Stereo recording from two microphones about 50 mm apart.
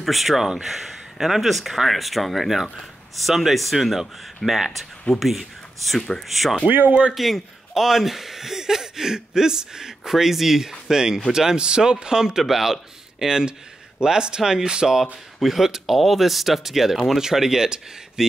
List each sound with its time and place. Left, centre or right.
0.0 s speech: centre
5.9 s speech: centre
6.2 s speech: centre
6.7 s speech: right
7.2 s speech: centre